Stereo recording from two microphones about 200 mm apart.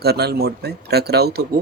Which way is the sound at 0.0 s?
55° right (ahead or behind).